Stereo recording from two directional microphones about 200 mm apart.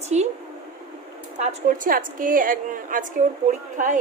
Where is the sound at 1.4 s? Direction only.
35° right (ahead or behind).